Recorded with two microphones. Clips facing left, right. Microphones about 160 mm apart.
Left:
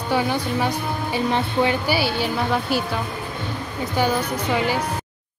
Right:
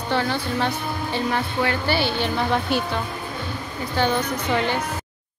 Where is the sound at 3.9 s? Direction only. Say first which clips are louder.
Even; 10° left (ahead or behind).